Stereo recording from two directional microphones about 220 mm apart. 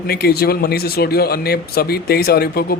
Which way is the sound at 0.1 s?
45° left (ahead or behind).